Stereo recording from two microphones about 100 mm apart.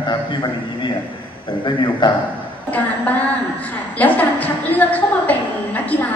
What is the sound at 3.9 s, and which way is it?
A woman's voice, 15° left (ahead or behind).